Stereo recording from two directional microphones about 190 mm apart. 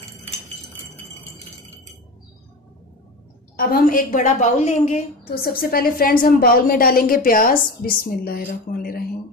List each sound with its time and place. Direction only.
3.5 s a woman's voice: 50° left (ahead or behind)
5.2 s a woman's voice: 50° left (ahead or behind)